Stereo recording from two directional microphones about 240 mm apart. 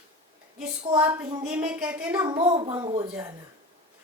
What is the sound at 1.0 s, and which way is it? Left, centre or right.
A woman's voice, centre.